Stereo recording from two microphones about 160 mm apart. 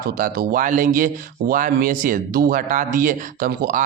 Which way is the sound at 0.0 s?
65° right (ahead or behind).